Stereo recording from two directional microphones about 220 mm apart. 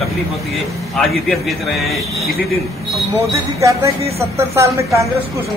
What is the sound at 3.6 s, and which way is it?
Speech, 15° right (ahead or behind).